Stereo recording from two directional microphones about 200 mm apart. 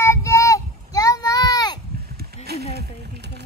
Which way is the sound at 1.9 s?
50° right (ahead or behind).